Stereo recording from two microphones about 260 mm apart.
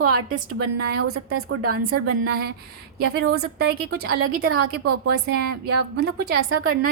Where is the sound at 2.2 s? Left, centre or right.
Right.